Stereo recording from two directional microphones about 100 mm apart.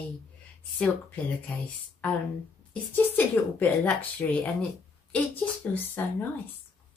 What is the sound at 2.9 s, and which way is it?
Speech, 20° left (ahead or behind).